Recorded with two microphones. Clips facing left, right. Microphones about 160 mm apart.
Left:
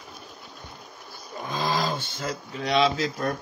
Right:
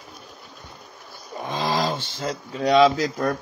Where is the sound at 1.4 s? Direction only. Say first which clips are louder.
Right 3 dB; 25° right (ahead or behind).